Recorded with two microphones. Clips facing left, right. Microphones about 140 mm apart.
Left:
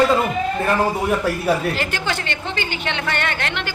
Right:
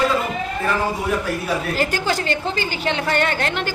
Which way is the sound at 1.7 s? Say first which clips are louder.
Right 3 dB; 40° right (ahead or behind).